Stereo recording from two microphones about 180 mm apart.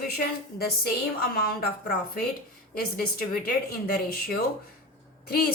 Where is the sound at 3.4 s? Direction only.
55° left (ahead or behind).